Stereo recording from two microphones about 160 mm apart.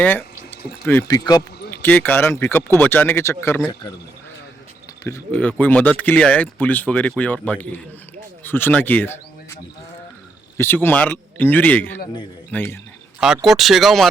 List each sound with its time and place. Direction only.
0.9 s speech: 15° left (ahead or behind)
1.7 s speech: 15° left (ahead or behind)
5.3 s speech: 10° left (ahead or behind)
10.6 s speech: 15° left (ahead or behind)
13.1 s speech: 5° right (ahead or behind)